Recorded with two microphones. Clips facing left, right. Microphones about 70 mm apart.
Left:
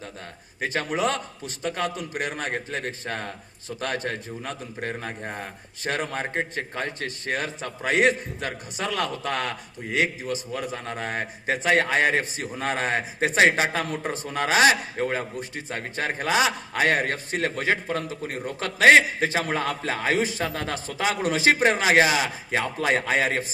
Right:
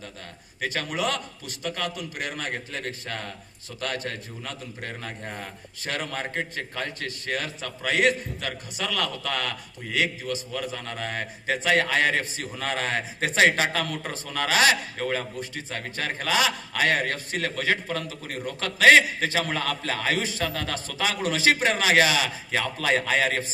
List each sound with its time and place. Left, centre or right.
0.6 s a man's voice: left